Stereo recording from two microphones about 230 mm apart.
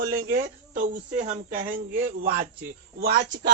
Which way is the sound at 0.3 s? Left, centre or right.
Right.